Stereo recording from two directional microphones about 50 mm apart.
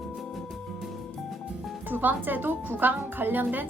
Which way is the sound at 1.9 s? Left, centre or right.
Right.